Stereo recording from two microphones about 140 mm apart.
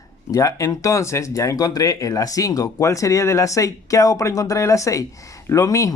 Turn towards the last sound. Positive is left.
turn(degrees=20)  # may be behind; listen again after turning